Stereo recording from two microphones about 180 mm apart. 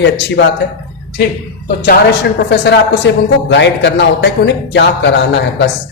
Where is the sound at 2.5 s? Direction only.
70° left (ahead or behind).